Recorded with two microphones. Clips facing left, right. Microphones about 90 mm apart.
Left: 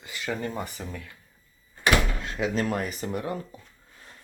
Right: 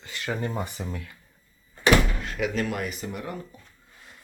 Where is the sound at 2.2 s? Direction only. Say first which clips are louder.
Even; 30° left (ahead or behind).